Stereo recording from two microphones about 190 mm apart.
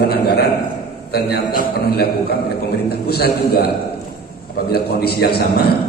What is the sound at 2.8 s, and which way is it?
Speech, 55° left (ahead or behind).